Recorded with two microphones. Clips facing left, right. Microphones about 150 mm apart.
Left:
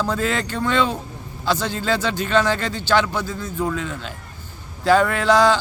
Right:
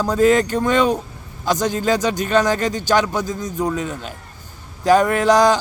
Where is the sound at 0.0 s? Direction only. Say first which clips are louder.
Right 8 dB; 15° right (ahead or behind).